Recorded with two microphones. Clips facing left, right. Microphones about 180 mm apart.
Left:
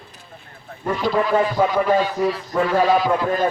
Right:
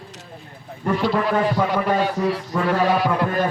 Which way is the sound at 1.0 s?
65° right (ahead or behind).